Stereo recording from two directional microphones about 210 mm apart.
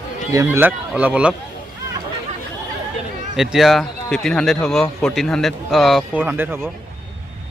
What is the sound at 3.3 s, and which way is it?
A man's voice, centre (ahead or behind).